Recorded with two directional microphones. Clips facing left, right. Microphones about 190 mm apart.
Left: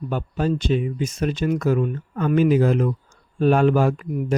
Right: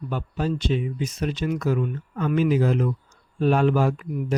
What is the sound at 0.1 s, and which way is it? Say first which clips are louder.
Speech: left 3 dB; 50° left (ahead or behind).